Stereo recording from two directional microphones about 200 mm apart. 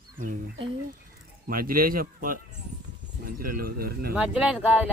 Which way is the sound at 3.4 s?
45° right (ahead or behind).